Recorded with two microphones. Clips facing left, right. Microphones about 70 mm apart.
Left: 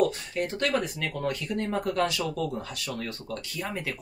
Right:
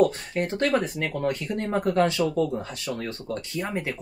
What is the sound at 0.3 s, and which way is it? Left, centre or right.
Speech, right.